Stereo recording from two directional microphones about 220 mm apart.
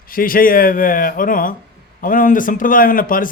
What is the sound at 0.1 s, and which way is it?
A man's voice, 40° left (ahead or behind).